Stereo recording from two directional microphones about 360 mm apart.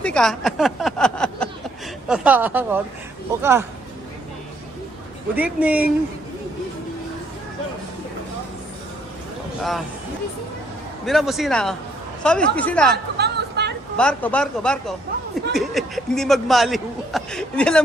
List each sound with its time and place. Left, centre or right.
0.0 s speech: centre
5.3 s speech: centre
11.0 s speech: centre
13.1 s chatter: right
13.9 s speech: centre